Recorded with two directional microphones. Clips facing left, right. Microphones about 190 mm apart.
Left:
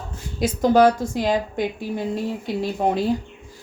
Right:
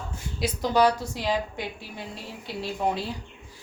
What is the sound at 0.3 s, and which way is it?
A woman's voice, 50° left (ahead or behind).